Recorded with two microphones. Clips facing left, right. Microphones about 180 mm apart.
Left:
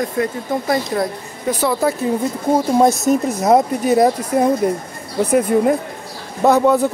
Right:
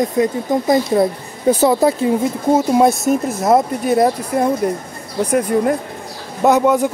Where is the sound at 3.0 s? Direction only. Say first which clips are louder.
Even; centre (ahead or behind).